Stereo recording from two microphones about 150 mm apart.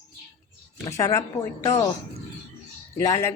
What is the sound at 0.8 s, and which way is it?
Speech, 20° left (ahead or behind).